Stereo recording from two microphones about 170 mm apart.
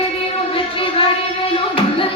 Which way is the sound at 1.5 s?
30° left (ahead or behind).